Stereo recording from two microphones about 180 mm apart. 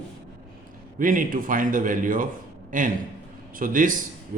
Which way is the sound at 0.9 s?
50° right (ahead or behind).